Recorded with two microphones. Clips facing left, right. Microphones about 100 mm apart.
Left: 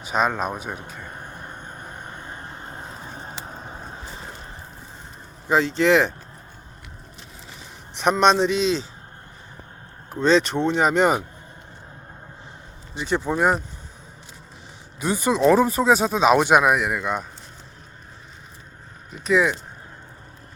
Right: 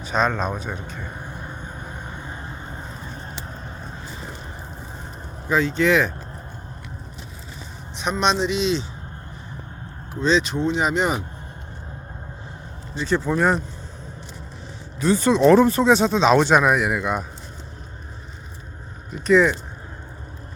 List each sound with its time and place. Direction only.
0.0 s a sound: 10° left (ahead or behind)
5.5 s speech: 30° left (ahead or behind)
8.2 s speech: 50° left (ahead or behind)
10.2 s speech: 55° left (ahead or behind)
12.9 s speech: 20° left (ahead or behind)
15.0 s speech: 10° left (ahead or behind)
19.2 s speech: 5° left (ahead or behind)